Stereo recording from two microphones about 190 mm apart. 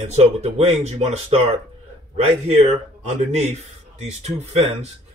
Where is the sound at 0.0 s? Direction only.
35° right (ahead or behind).